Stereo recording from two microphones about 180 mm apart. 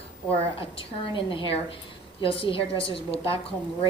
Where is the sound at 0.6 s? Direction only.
30° left (ahead or behind).